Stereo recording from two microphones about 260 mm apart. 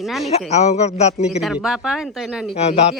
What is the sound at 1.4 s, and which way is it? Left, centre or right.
Speech, centre.